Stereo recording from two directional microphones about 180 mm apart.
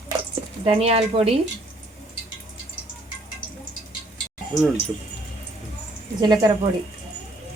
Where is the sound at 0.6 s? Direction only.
35° right (ahead or behind).